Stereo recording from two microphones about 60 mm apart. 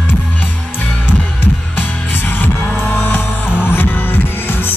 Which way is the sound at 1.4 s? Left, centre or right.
Left.